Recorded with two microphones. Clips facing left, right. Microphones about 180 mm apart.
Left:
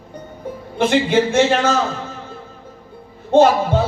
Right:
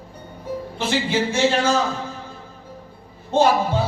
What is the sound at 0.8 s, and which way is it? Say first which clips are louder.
Speech: left 7 dB; 55° left (ahead or behind).